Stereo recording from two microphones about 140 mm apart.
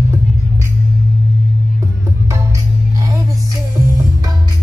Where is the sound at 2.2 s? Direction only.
25° right (ahead or behind).